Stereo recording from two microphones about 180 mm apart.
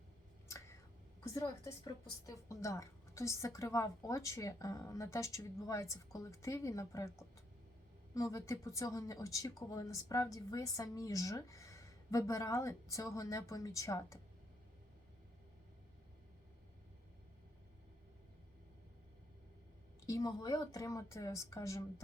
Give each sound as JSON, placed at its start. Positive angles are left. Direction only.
{"t": 0.4, "sound": "a sound", "side_deg": 15}
{"t": 1.2, "sound": "speech", "side_deg": 20}
{"t": 20.1, "sound": "speech", "side_deg": 20}